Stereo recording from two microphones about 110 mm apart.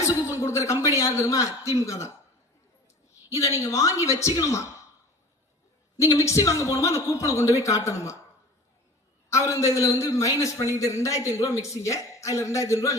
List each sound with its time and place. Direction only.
0.3 s a man's voice: 25° left (ahead or behind)
3.2 s a woman's voice: 30° left (ahead or behind)
6.0 s a man's voice: 30° left (ahead or behind)
9.3 s a man's voice: 30° left (ahead or behind)